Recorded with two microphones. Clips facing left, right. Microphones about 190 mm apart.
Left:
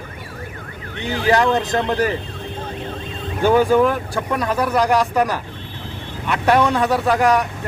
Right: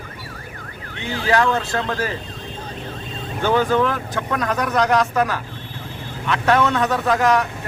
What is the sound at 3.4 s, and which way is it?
Speech, 15° left (ahead or behind).